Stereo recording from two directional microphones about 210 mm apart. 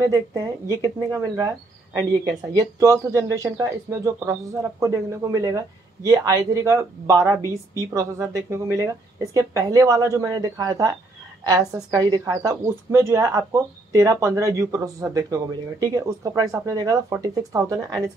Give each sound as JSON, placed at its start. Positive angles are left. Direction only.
{"t": 0.0, "sound": "speech", "side_deg": -15}
{"t": 2.5, "sound": "speech", "side_deg": -15}